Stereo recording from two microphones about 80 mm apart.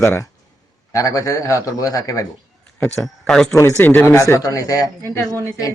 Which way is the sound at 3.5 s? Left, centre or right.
Left.